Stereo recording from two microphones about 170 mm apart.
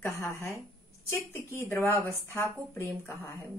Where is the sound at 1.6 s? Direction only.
15° left (ahead or behind).